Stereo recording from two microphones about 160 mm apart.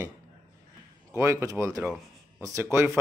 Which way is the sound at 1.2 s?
15° right (ahead or behind).